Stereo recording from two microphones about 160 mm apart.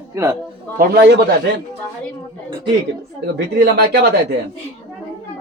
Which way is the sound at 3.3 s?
90° right.